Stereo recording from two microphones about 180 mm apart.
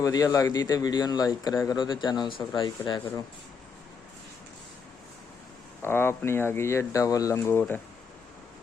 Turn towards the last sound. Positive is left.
turn(degrees=10)  # may be behind; listen again after turning